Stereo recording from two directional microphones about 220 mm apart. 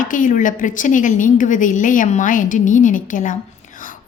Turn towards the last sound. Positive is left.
turn(degrees=35)  # may be behind; listen again after turning